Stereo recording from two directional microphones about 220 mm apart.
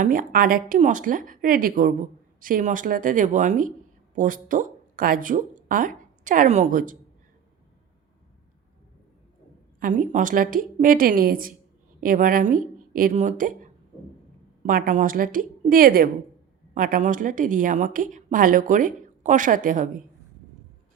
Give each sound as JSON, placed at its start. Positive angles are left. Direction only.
{"t": 0.0, "sound": "speech", "side_deg": -40}
{"t": 9.8, "sound": "speech", "side_deg": -35}
{"t": 14.6, "sound": "speech", "side_deg": -40}